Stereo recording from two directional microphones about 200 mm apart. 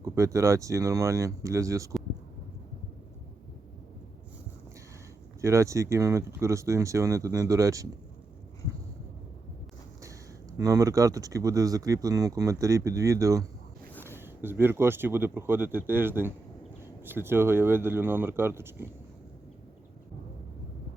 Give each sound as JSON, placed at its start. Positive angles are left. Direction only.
{"t": 0.0, "sound": "speech", "side_deg": -15}
{"t": 5.4, "sound": "speech", "side_deg": -15}
{"t": 10.6, "sound": "speech", "side_deg": -15}